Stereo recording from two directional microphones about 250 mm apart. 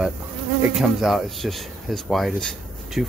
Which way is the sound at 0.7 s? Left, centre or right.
Centre.